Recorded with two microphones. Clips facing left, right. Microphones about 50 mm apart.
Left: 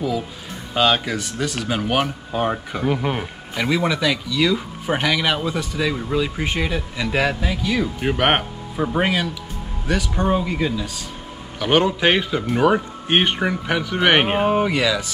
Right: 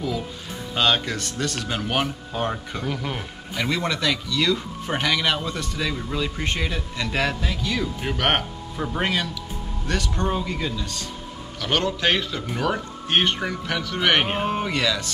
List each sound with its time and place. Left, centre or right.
0.7 s speech: centre
3.5 s a man's voice: centre